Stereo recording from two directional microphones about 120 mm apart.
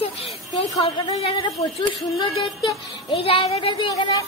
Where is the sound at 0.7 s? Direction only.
60° left (ahead or behind).